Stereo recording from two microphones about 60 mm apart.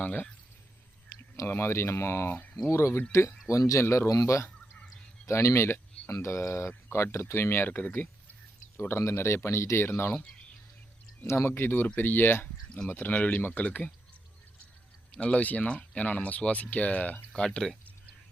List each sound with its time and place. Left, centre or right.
0.0 s speech: left
1.4 s speech: left
3.8 s speech: left
4.1 s speech: left
8.8 s speech: left
11.3 s speech: left
15.1 s speech: left
17.3 s a sound: centre